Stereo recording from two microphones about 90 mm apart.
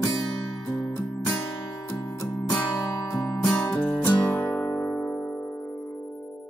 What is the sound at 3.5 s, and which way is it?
Music, 20° left (ahead or behind).